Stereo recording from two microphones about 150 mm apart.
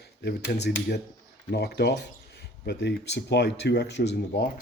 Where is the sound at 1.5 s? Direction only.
90° left.